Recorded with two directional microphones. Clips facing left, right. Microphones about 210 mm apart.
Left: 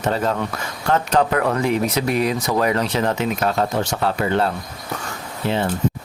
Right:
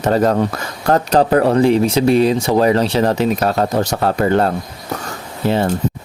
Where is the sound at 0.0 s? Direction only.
40° right (ahead or behind).